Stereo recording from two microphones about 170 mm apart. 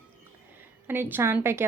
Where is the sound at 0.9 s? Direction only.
10° right (ahead or behind).